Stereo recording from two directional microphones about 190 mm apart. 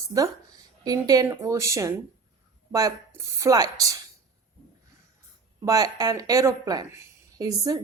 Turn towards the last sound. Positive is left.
turn(degrees=-20)  # may be behind; listen again after turning